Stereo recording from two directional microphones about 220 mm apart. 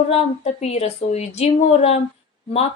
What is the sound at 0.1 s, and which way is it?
Speech, 30° left (ahead or behind).